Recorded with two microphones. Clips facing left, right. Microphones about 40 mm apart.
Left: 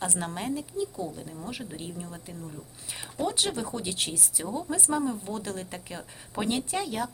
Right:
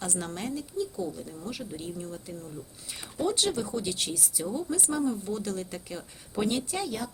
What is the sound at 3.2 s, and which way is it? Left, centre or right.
Speech, centre.